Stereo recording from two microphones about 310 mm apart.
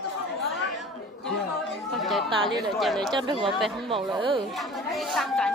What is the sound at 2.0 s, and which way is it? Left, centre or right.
Chatter, centre.